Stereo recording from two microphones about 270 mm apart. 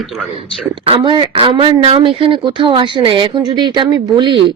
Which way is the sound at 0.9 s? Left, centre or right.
Centre.